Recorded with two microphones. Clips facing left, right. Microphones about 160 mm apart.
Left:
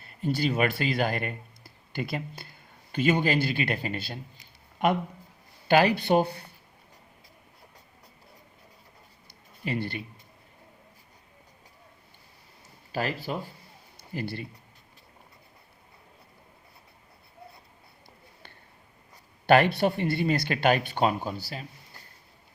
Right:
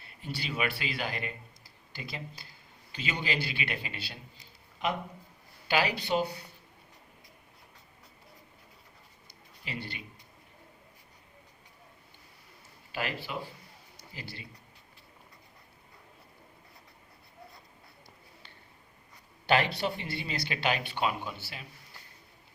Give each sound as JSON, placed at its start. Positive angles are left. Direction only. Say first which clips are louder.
{"t": 0.0, "sound": "speech", "louder": "left 12 dB", "side_deg": 45}
{"t": 5.6, "sound": "speech", "louder": "left 8 dB", "side_deg": 50}
{"t": 9.6, "sound": "speech", "louder": "left 9 dB", "side_deg": 50}
{"t": 12.9, "sound": "speech", "louder": "left 5 dB", "side_deg": 40}
{"t": 13.9, "sound": "a sound", "louder": "left 12 dB", "side_deg": 55}
{"t": 19.5, "sound": "speech", "louder": "left 7 dB", "side_deg": 55}